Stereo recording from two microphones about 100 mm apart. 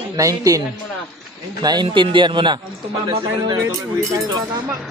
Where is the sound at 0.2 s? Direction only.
35° right (ahead or behind); by 2.6 s 50° right (ahead or behind).